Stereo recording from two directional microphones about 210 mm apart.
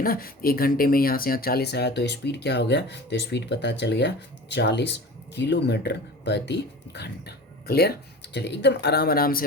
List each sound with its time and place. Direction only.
0.0 s speech: 45° left (ahead or behind)